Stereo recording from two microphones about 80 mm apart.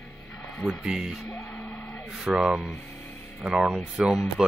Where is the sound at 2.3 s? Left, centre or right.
Centre.